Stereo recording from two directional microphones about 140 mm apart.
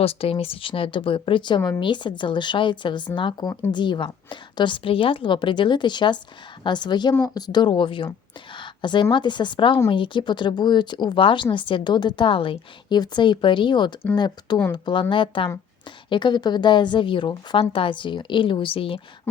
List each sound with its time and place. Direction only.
0.0 s a woman's voice: 45° left (ahead or behind)
8.5 s a sound: 35° left (ahead or behind)
9.1 s a woman's voice: 35° left (ahead or behind)